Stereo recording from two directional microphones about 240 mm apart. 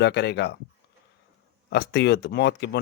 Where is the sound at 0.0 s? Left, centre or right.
Left.